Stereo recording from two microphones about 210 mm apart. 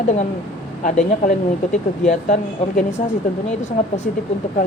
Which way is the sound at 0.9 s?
40° left (ahead or behind).